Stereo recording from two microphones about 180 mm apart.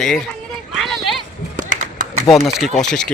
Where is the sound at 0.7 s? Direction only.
Centre (ahead or behind).